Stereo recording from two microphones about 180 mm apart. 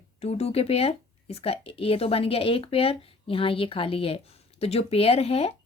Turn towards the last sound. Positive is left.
turn(degrees=35)  # may be behind; listen again after turning